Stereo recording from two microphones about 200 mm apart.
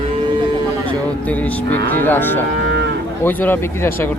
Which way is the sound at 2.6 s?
60° right (ahead or behind).